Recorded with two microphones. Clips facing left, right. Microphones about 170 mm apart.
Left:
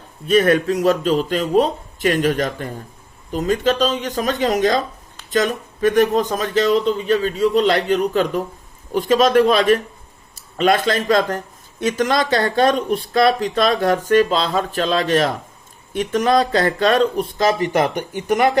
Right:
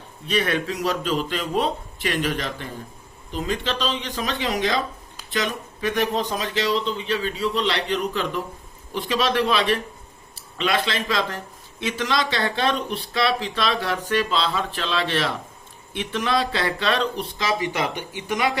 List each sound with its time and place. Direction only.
0.3 s speech: 45° left (ahead or behind)